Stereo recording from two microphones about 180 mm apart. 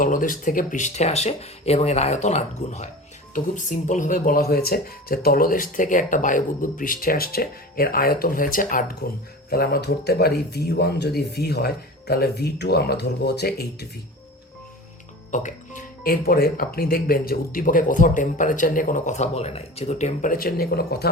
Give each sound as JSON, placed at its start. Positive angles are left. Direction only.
{"t": 0.0, "sound": "speech", "side_deg": 50}
{"t": 15.3, "sound": "speech", "side_deg": 45}
{"t": 20.6, "sound": "speech", "side_deg": 60}